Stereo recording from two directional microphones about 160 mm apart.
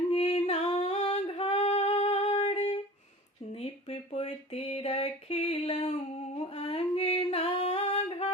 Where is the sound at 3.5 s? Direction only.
40° left (ahead or behind).